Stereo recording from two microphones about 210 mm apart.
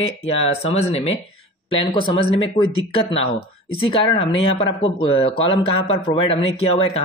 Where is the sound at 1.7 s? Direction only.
25° left (ahead or behind).